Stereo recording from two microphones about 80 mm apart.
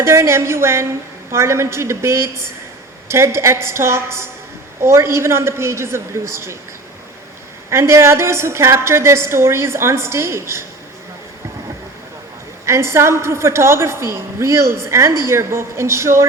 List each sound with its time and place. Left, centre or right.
0.0 s a woman's voice: right
7.7 s a woman's voice: right
12.6 s a woman's voice: right